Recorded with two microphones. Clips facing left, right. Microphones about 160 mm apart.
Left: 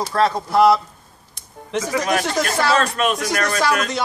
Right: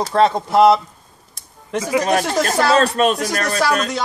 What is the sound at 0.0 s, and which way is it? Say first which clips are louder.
Speech: right 3 dB; 25° right (ahead or behind).